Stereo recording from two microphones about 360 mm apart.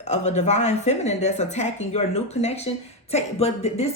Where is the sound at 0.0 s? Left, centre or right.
Centre.